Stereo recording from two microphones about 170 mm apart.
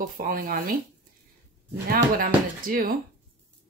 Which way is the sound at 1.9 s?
60° right (ahead or behind).